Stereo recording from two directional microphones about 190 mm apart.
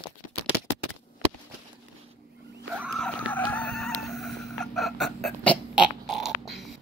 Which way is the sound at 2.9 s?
5° left (ahead or behind).